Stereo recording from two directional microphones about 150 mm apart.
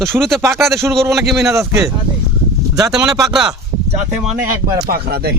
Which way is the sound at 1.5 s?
20° right (ahead or behind).